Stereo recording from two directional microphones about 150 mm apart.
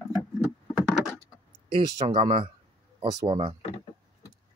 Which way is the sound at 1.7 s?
40° right (ahead or behind).